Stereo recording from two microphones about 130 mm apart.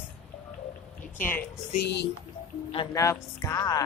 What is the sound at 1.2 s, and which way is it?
Speech, 15° left (ahead or behind).